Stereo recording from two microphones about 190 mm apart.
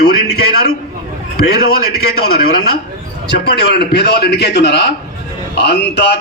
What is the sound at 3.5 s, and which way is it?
A man's voice, 60° left (ahead or behind).